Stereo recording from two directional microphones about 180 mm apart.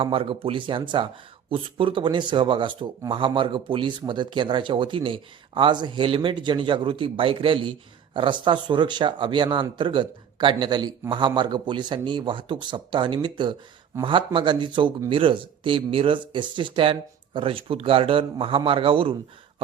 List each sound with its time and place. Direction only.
0.0 s speech: 30° right (ahead or behind)